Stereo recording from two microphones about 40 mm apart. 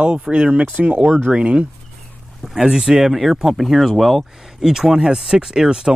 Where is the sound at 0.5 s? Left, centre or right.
Right.